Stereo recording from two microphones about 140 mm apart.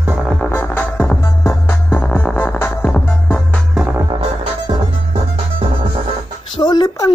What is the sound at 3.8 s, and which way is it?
Music, 15° right (ahead or behind).